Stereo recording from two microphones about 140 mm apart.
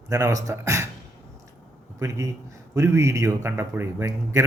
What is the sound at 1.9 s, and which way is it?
Speech, 20° right (ahead or behind).